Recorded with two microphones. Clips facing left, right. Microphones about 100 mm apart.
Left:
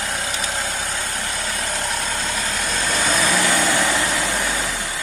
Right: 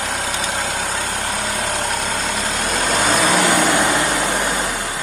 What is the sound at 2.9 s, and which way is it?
Vehicle, 60° right (ahead or behind).